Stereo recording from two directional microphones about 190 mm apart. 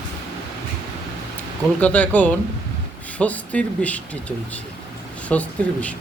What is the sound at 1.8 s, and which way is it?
Speech, 10° left (ahead or behind).